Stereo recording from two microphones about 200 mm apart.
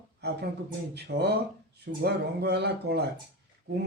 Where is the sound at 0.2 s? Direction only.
55° right (ahead or behind).